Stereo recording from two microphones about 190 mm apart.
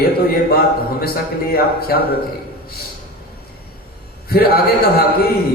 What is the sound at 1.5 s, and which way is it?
Speech, 55° left (ahead or behind).